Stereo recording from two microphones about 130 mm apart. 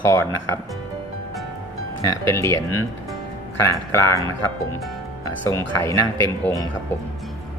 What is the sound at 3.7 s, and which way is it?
Speech, 20° left (ahead or behind).